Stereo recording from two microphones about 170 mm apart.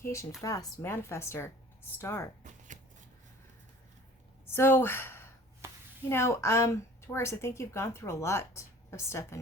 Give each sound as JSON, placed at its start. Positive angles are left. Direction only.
{"t": 0.0, "sound": "a woman's voice", "side_deg": 15}
{"t": 4.5, "sound": "a woman's voice", "side_deg": 15}